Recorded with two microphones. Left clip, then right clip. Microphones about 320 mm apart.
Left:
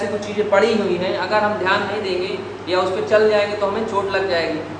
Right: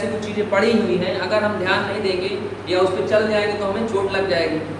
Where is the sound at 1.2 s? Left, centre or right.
Centre.